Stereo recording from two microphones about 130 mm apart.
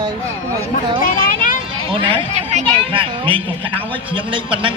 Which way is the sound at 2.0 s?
45° right (ahead or behind).